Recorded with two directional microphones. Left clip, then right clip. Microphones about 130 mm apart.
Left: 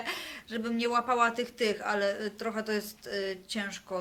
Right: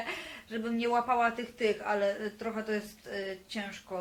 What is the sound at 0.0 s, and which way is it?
Speech, 30° left (ahead or behind).